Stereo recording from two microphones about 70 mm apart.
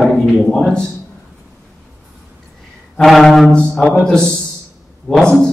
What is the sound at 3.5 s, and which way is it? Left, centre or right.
A man's voice, centre.